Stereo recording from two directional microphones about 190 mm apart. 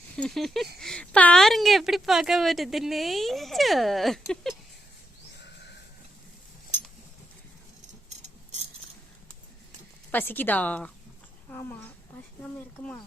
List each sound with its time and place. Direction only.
0.2 s a woman's voice: centre (ahead or behind)
10.1 s speech: 10° left (ahead or behind)